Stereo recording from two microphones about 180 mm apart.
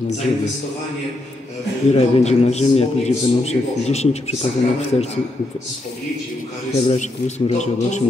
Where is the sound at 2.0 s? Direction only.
35° left (ahead or behind).